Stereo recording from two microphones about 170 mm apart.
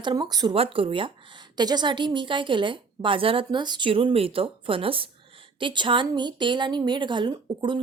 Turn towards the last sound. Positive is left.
turn(degrees=-30)  # may be behind; listen again after turning